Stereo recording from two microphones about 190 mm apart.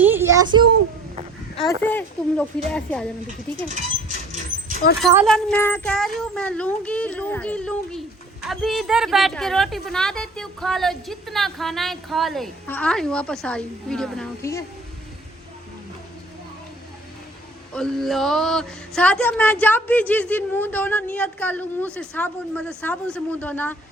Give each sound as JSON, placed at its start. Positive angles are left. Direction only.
{"t": 0.0, "sound": "a sound", "side_deg": -10}
{"t": 1.5, "sound": "a child's voice", "side_deg": 5}
{"t": 4.8, "sound": "speech", "side_deg": 50}
{"t": 5.2, "sound": "a child's voice", "side_deg": 5}
{"t": 17.7, "sound": "speech", "side_deg": 0}